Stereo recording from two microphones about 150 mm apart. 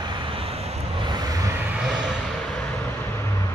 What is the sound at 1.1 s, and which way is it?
Vehicle, 25° right (ahead or behind).